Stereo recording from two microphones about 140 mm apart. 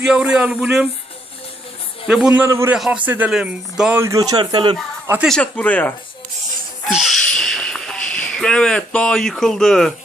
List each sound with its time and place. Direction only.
0.0 s speech: 5° right (ahead or behind)
2.0 s speech: 5° right (ahead or behind)
2.7 s a man's voice: 5° right (ahead or behind)
4.0 s speech: 25° right (ahead or behind)
5.2 s speech: 5° left (ahead or behind)
6.9 s speech: centre (ahead or behind)